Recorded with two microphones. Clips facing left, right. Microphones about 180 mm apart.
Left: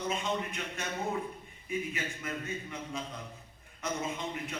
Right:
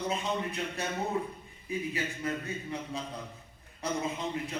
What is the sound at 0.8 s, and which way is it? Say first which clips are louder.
A man's voice: right 2 dB; 35° right (ahead or behind).